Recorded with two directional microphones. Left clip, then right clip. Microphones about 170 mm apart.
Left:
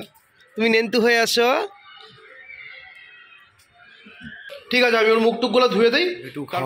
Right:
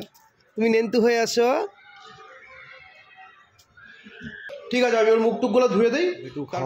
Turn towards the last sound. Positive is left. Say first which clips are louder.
# left 3 dB
turn(degrees=0)  # may be behind; listen again after turning